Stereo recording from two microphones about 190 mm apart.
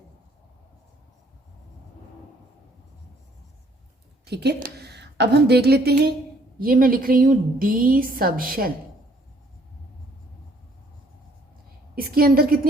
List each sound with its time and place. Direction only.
4.3 s a woman's voice: 60° right (ahead or behind)
11.9 s a woman's voice: 50° right (ahead or behind)